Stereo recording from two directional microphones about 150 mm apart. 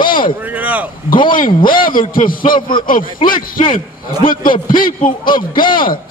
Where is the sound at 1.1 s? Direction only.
35° left (ahead or behind).